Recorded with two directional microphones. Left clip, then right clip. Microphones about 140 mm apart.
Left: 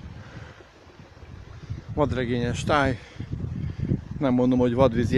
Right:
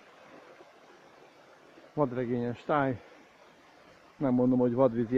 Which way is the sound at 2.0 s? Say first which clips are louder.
Left 5 dB; 20° left (ahead or behind).